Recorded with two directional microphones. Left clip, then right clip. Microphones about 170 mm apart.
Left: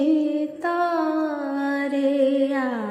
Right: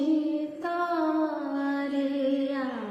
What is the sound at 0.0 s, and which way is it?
Music, 35° left (ahead or behind).